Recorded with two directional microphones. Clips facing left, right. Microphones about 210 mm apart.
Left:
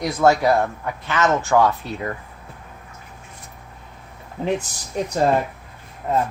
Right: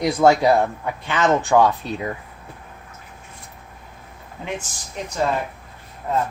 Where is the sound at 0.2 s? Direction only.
15° right (ahead or behind).